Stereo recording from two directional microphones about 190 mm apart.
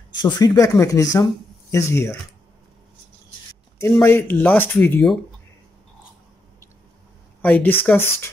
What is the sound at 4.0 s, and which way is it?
Speech, 10° left (ahead or behind).